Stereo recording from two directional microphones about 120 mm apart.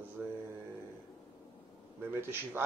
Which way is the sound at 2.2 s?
20° right (ahead or behind).